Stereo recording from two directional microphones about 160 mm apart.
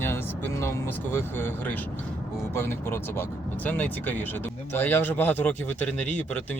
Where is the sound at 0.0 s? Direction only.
15° left (ahead or behind).